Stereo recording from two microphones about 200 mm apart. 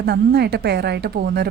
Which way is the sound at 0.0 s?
55° right (ahead or behind).